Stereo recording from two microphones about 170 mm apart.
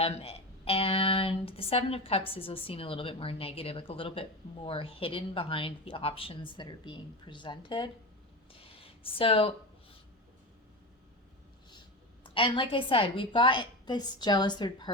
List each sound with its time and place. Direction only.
0.0 s speech: 35° left (ahead or behind)
8.5 s a sound: 35° left (ahead or behind)
12.2 s a woman's voice: 30° left (ahead or behind)